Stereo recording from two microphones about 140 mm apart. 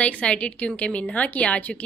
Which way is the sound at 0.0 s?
10° left (ahead or behind).